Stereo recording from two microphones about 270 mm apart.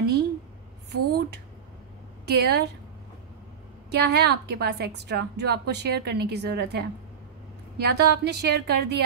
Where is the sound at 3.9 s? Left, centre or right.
Right.